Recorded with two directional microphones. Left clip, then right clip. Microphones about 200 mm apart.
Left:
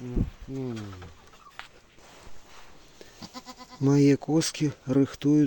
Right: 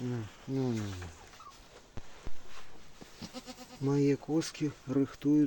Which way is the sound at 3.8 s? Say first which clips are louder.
Left 8 dB; 60° left (ahead or behind).